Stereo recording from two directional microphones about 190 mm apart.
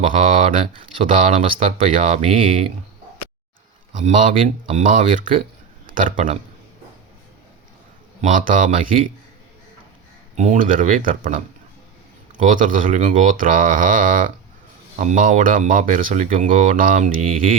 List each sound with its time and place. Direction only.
0.0 s speech: 35° right (ahead or behind)
3.9 s a man's voice: 40° right (ahead or behind)
8.2 s speech: 45° right (ahead or behind)
10.3 s speech: 40° right (ahead or behind)
12.5 s speech: 45° right (ahead or behind)